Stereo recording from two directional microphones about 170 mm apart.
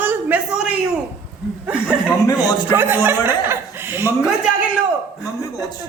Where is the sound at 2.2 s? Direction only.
25° left (ahead or behind).